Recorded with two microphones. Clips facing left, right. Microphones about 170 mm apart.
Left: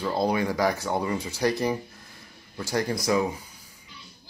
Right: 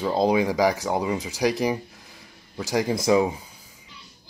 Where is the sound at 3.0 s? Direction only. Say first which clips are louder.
Right 6 dB; 20° right (ahead or behind).